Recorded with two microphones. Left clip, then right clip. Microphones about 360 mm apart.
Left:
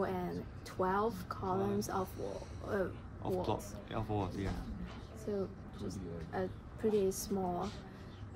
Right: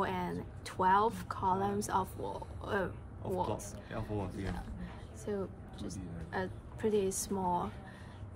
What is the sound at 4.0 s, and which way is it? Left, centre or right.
Speech, centre.